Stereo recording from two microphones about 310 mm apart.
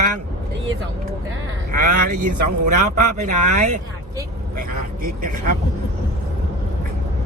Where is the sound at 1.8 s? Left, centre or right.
Right.